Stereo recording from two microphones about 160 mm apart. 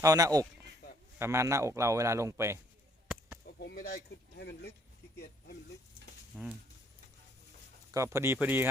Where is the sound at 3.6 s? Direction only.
85° left.